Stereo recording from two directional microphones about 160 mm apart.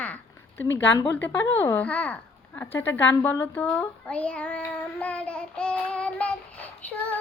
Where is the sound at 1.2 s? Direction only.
15° left (ahead or behind).